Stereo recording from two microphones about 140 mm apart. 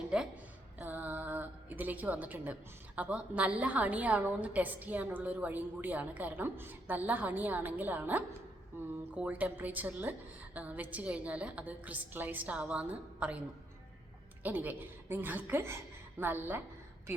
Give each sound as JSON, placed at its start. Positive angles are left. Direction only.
{"t": 0.1, "sound": "a woman's voice", "side_deg": -5}
{"t": 14.4, "sound": "a woman's voice", "side_deg": -10}